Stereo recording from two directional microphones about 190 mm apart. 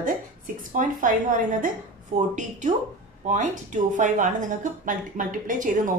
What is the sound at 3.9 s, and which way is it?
A woman's voice, 40° right (ahead or behind).